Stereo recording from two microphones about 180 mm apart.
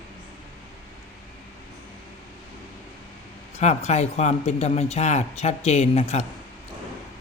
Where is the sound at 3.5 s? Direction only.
40° left (ahead or behind).